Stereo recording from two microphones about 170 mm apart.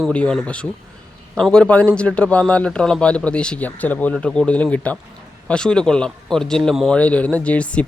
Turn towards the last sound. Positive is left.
turn(degrees=5)  # may be behind; listen again after turning